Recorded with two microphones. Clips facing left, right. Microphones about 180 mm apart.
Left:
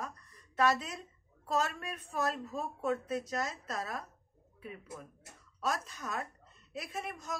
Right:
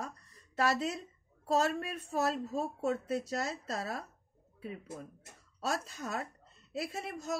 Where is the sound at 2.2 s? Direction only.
35° right (ahead or behind).